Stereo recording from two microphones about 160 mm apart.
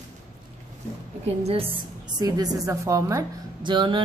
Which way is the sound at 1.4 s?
35° right (ahead or behind).